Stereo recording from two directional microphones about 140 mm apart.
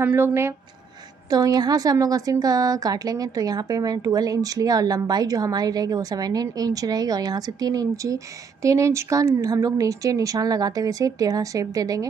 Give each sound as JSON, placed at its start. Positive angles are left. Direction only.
{"t": 0.0, "sound": "a woman's voice", "side_deg": -15}